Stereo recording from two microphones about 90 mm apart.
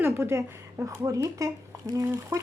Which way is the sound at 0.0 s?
30° right (ahead or behind).